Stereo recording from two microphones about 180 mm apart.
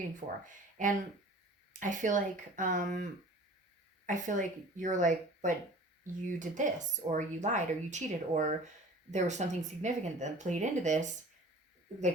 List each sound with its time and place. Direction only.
0.4 s a woman's voice: 45° right (ahead or behind)